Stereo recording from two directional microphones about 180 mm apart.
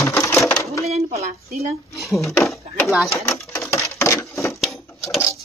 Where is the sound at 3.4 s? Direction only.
15° left (ahead or behind).